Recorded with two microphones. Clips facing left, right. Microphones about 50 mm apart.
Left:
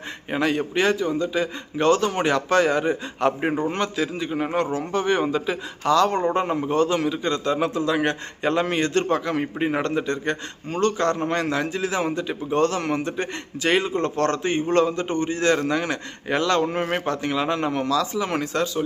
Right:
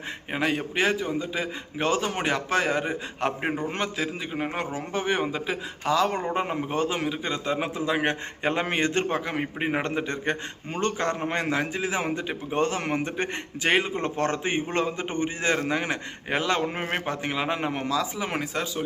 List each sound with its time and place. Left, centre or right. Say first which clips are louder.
0.3 s a man's voice: left 4 dB; centre